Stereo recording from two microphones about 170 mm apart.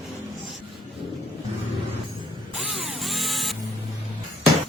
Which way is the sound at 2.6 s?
Centre (ahead or behind).